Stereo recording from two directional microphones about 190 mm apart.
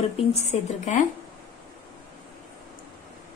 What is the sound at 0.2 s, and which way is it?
Speech, 35° left (ahead or behind).